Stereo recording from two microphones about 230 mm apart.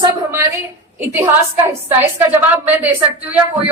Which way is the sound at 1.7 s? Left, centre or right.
Centre.